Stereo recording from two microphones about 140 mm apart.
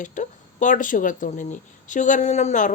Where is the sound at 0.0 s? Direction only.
65° left (ahead or behind).